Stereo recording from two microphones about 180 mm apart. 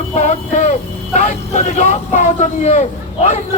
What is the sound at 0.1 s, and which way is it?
Speech, 40° left (ahead or behind).